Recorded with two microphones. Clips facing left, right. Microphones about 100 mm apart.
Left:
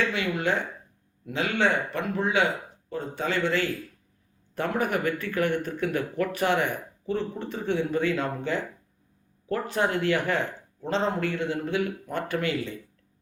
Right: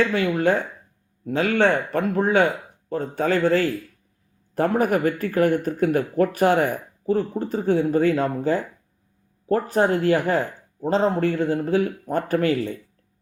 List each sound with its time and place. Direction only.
0.0 s speech: 40° right (ahead or behind)